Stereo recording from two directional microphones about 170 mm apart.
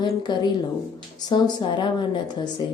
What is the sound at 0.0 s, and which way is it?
Speech, 25° left (ahead or behind).